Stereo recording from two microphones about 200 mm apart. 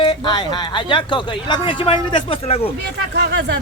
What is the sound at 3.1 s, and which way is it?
Speech, 55° right (ahead or behind).